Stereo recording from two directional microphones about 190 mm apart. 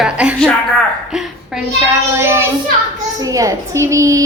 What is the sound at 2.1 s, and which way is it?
A woman's voice, 15° right (ahead or behind).